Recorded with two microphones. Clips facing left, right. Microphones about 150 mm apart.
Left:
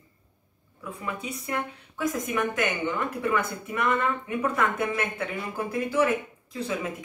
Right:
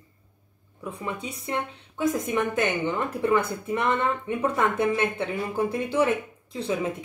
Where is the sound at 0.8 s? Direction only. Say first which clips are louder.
Right 2 dB; 30° right (ahead or behind).